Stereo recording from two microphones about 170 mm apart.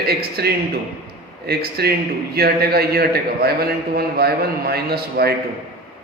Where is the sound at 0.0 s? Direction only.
65° right (ahead or behind).